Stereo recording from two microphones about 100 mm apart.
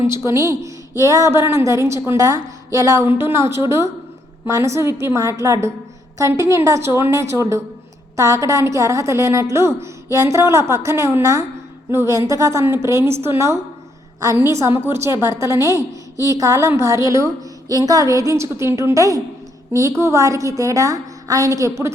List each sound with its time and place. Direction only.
0.3 s a woman's voice: 30° right (ahead or behind)